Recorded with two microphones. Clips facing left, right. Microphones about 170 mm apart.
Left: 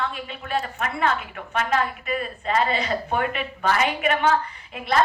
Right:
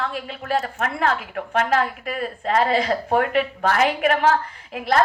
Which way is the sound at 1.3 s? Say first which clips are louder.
Right 4 dB; 65° right (ahead or behind).